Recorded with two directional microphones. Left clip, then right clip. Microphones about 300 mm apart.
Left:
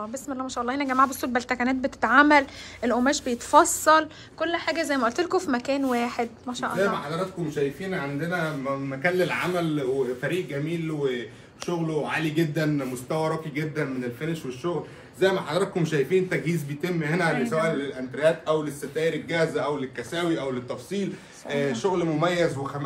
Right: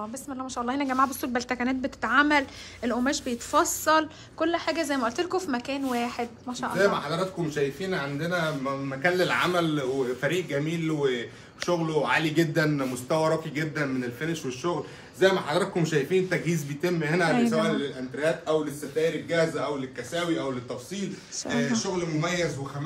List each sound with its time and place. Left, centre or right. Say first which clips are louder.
0.3 s a woman's voice: left 2 dB; centre
19.2 s a man's voice: even; left
21.5 s a man's voice: left 3 dB; centre